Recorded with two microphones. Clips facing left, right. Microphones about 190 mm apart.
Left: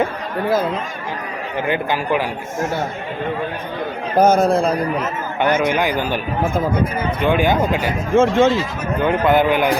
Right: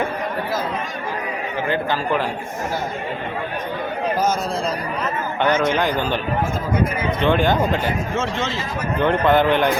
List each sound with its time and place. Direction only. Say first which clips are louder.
1.6 s a man's voice: left 2 dB; 15° left (ahead or behind)
4.2 s a man's voice: left 12 dB; 55° left (ahead or behind)
5.4 s a man's voice: left 2 dB; 10° left (ahead or behind)
7.2 s a man's voice: left 1 dB; 10° left (ahead or behind)
8.1 s speech: left 10 dB; 50° left (ahead or behind)
9.0 s a man's voice: left 1 dB; 5° left (ahead or behind)